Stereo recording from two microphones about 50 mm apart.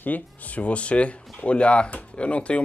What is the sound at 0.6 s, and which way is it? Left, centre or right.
Speech, left.